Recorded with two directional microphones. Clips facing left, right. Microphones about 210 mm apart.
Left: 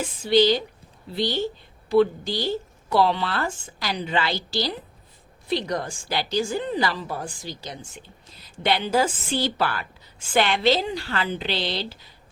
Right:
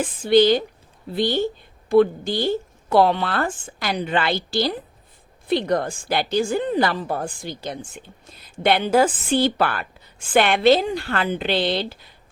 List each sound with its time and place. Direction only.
0.0 s a woman's voice: 55° right (ahead or behind)